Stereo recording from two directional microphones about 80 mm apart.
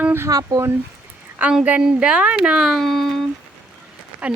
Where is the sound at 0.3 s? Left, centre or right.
Right.